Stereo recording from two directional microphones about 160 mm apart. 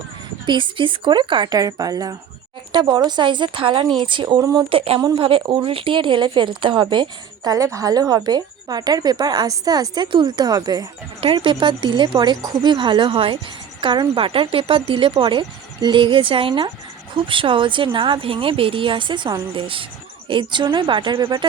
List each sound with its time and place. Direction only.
0.4 s speech: 30° right (ahead or behind)